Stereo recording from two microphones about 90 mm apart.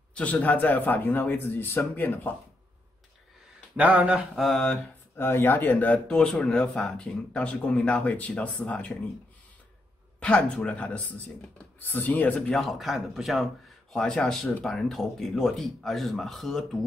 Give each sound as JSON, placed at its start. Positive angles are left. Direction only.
{"t": 0.1, "sound": "a man's voice", "side_deg": 15}
{"t": 3.7, "sound": "speech", "side_deg": -15}
{"t": 4.4, "sound": "speech", "side_deg": 0}
{"t": 5.1, "sound": "speech", "side_deg": 25}
{"t": 10.2, "sound": "a man's voice", "side_deg": 15}
{"t": 12.4, "sound": "speech", "side_deg": 0}